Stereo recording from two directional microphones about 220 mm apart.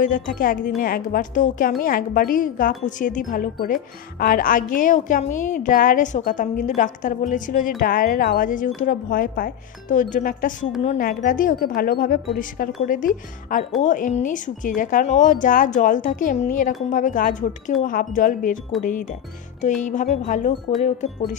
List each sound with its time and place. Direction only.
0.0 s speech: 40° left (ahead or behind)